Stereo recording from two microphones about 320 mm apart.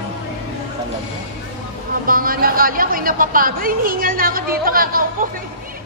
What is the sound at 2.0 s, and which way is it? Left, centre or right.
Speech, right.